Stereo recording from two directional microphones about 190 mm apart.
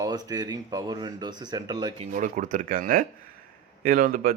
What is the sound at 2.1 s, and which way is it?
Speech, 40° right (ahead or behind).